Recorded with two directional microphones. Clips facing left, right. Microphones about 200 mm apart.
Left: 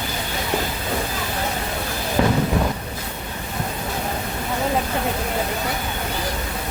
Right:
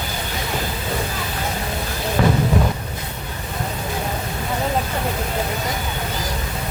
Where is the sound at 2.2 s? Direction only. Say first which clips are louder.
Even; 15° left (ahead or behind).